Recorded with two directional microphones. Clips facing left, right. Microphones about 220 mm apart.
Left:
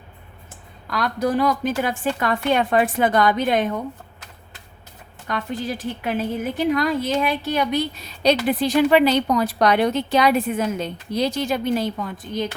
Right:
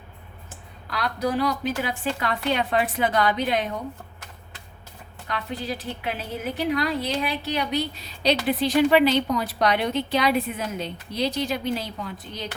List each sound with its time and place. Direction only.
0.9 s a woman's voice: 45° left (ahead or behind)
5.3 s a woman's voice: 50° left (ahead or behind)